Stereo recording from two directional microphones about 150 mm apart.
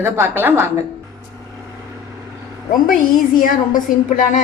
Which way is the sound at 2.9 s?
65° left (ahead or behind).